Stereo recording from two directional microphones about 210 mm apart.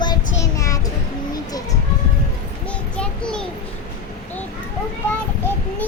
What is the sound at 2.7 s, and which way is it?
Speech, 5° left (ahead or behind).